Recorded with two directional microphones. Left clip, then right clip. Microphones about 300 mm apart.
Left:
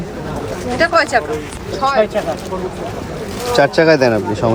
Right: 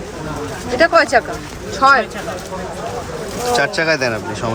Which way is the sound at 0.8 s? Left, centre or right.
Right.